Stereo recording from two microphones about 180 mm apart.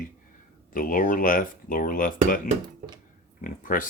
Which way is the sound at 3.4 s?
50° left (ahead or behind).